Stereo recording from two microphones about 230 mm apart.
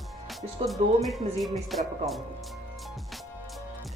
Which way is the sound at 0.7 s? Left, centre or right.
Centre.